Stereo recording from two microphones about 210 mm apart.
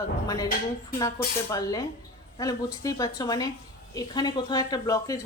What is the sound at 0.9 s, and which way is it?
Speech, 15° left (ahead or behind).